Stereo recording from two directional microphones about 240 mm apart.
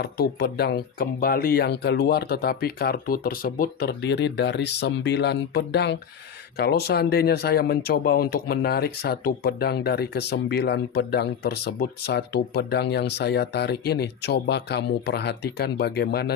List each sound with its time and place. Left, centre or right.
0.0 s speech: left